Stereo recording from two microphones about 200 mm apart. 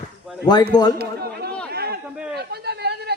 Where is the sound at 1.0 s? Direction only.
50° right (ahead or behind).